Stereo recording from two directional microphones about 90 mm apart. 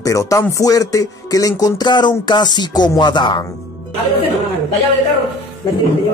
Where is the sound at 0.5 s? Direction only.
40° left (ahead or behind); by 3.5 s 55° left (ahead or behind).